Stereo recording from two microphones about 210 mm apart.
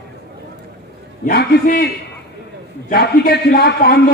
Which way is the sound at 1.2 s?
45° left (ahead or behind).